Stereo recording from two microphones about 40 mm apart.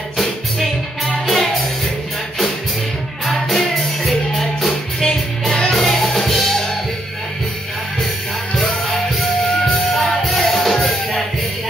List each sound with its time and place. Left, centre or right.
0.2 s music: centre
3.3 s music: centre
9.9 s music: centre